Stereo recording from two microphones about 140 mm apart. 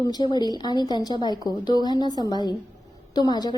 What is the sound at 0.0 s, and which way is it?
A woman's voice, 30° left (ahead or behind).